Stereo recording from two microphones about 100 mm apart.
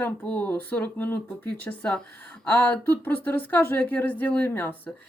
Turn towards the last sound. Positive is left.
turn(degrees=20)  # may be behind; listen again after turning